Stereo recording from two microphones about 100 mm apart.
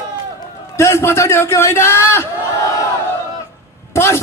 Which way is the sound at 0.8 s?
25° left (ahead or behind).